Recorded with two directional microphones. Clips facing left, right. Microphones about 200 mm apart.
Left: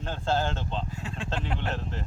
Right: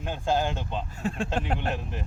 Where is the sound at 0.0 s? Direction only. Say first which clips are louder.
Right 1 dB; 15° right (ahead or behind).